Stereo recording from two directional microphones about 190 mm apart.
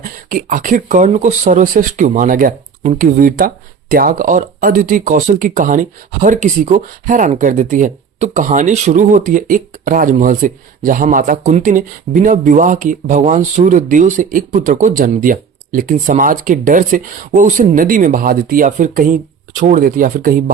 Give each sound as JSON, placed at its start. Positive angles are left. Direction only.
{"t": 0.0, "sound": "speech", "side_deg": -45}